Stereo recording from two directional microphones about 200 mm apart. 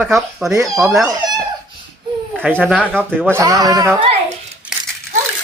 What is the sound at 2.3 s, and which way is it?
Speech, 10° right (ahead or behind).